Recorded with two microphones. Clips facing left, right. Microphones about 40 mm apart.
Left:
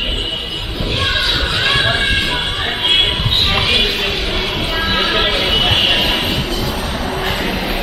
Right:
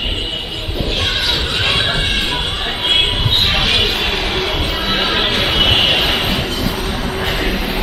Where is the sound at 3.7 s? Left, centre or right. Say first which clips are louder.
Even; centre.